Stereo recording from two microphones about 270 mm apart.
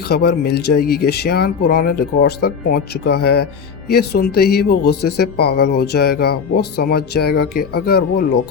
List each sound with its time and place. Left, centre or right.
0.1 s speech: left